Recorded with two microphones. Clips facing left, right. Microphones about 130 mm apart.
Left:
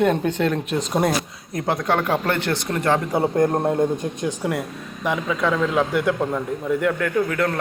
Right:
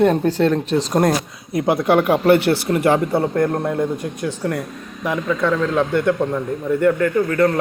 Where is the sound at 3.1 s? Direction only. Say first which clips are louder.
Right 2 dB; 15° left (ahead or behind).